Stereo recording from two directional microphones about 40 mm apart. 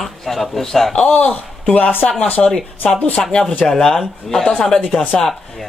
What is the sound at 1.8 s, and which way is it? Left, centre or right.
Speech, left.